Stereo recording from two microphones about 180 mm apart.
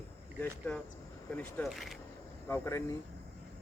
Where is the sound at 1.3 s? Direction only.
Centre (ahead or behind).